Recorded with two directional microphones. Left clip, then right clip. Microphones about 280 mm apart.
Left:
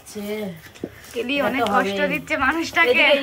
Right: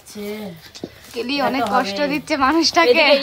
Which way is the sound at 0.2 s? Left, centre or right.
Centre.